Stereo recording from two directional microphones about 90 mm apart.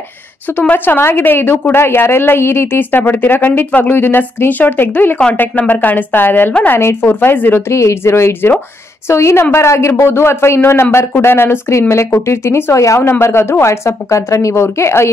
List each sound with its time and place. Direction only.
0.6 s a woman's voice: 20° left (ahead or behind)